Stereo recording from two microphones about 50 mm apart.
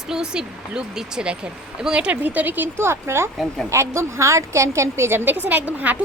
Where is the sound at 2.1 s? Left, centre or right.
Right.